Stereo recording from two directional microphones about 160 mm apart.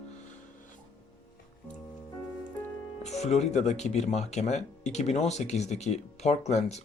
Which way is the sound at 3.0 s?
45° left (ahead or behind).